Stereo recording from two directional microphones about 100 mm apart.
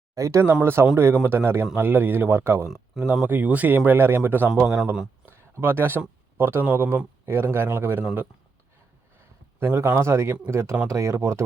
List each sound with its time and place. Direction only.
0.1 s a man's voice: 30° right (ahead or behind)
9.6 s a man's voice: 25° right (ahead or behind)